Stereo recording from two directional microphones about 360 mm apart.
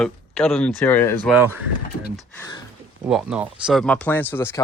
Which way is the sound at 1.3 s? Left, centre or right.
Centre.